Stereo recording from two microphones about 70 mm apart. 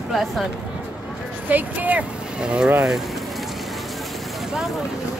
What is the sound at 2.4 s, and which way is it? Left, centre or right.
Speech, centre.